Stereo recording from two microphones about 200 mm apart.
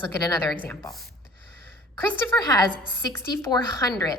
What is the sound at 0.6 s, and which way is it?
Speech, 10° left (ahead or behind).